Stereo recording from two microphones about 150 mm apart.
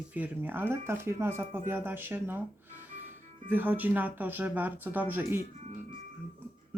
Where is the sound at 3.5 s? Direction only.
10° right (ahead or behind).